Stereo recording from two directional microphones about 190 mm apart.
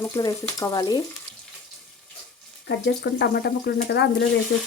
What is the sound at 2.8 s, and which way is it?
Speech, 60° left (ahead or behind).